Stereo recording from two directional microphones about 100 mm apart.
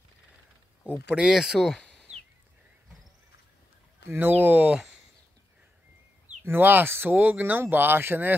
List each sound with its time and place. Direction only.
1.1 s speech: 5° right (ahead or behind)
1.8 s a sound: 10° left (ahead or behind)
4.1 s speech: 20° right (ahead or behind)
6.2 s speech: 20° right (ahead or behind)